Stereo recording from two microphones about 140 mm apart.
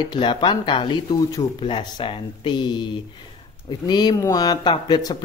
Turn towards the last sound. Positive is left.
turn(degrees=30)  # may be behind; listen again after turning